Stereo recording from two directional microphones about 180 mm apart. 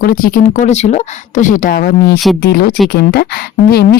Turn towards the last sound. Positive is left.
turn(degrees=60)  # may be behind; listen again after turning